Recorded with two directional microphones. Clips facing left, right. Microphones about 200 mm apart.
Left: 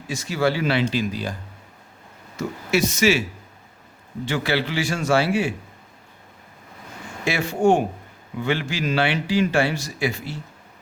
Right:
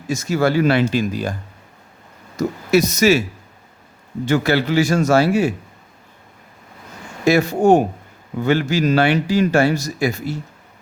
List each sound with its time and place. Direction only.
0.1 s speech: 45° right (ahead or behind)
4.3 s speech: 45° right (ahead or behind)
7.3 s speech: 40° right (ahead or behind)